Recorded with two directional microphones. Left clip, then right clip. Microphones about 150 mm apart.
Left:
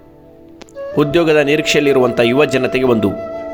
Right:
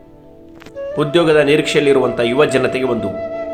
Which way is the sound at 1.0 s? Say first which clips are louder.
Even; 45° left (ahead or behind).